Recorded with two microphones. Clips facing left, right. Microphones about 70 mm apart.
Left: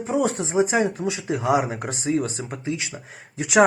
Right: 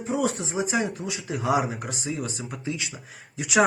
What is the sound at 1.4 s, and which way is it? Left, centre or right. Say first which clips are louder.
Speech: left 2 dB; left.